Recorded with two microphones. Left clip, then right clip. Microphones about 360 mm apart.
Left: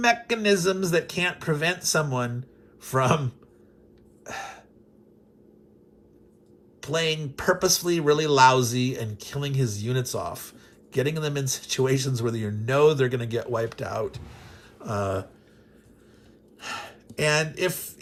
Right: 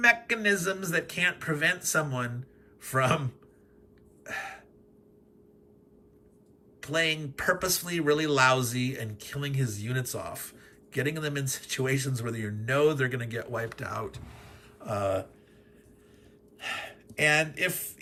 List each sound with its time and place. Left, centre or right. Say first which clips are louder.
0.0 s speech: left 1 dB; centre
4.2 s gasp: left 1 dB; centre
6.8 s speech: left 2 dB; centre
16.6 s speech: even; centre